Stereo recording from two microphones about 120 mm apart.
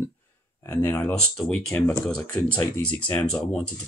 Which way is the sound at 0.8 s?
15° left (ahead or behind).